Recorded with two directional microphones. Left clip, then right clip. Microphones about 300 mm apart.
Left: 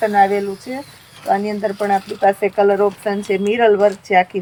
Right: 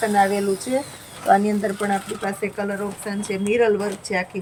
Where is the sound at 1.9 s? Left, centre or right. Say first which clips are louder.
Left 10 dB; centre.